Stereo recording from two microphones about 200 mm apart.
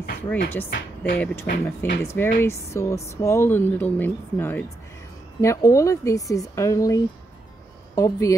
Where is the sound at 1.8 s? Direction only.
10° left (ahead or behind).